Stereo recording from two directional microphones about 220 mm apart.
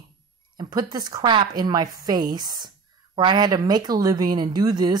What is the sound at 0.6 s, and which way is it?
A woman's voice, 20° right (ahead or behind).